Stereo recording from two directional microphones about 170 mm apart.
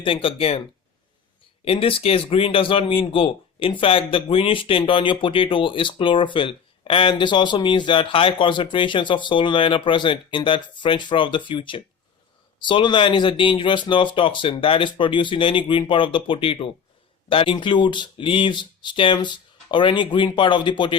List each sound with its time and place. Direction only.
0.0 s speech: 30° left (ahead or behind)
1.6 s speech: 35° left (ahead or behind)